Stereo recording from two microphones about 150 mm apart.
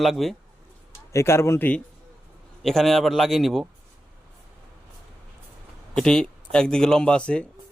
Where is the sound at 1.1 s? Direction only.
20° left (ahead or behind); by 3.6 s centre (ahead or behind).